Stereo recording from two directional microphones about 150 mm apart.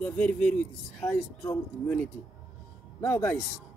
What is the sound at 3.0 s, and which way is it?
Speech, 15° left (ahead or behind).